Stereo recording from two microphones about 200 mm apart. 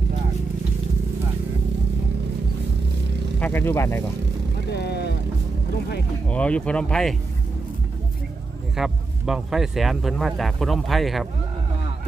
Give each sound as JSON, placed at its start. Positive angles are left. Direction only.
{"t": 3.3, "sound": "speech", "side_deg": 10}
{"t": 4.7, "sound": "vehicle", "side_deg": 55}
{"t": 6.2, "sound": "speech", "side_deg": 5}
{"t": 8.7, "sound": "speech", "side_deg": 0}